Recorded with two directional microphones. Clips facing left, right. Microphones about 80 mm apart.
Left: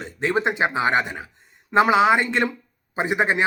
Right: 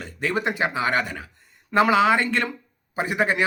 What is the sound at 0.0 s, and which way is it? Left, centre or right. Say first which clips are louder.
Speech: left 3 dB; left.